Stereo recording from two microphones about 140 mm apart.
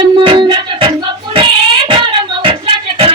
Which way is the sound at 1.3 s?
35° right (ahead or behind).